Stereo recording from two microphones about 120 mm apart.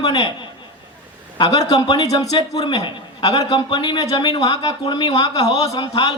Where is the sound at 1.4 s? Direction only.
35° left (ahead or behind).